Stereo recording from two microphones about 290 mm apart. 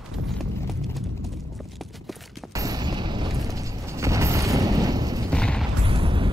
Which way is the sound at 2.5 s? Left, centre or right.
Centre.